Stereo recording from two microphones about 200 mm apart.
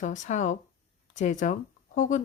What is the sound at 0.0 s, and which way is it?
A woman's voice, 40° left (ahead or behind).